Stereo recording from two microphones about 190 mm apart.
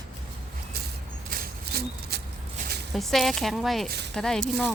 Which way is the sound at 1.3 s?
55° right (ahead or behind).